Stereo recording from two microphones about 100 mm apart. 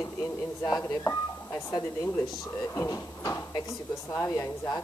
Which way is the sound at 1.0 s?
25° left (ahead or behind).